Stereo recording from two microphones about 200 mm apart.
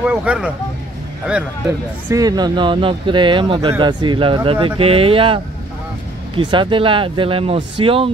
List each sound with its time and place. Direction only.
0.0 s speech: 5° right (ahead or behind)
2.0 s speech: 15° right (ahead or behind)